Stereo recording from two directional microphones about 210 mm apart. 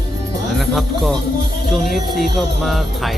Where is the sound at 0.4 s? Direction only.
Centre (ahead or behind).